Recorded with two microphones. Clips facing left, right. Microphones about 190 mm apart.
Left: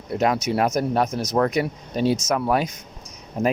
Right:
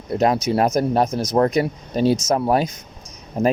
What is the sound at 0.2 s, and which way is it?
Speech, 35° right (ahead or behind).